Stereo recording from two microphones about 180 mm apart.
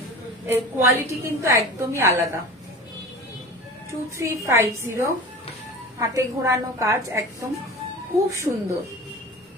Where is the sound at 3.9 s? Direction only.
15° right (ahead or behind).